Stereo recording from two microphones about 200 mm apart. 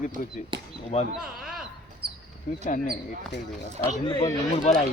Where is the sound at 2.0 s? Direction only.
50° right (ahead or behind).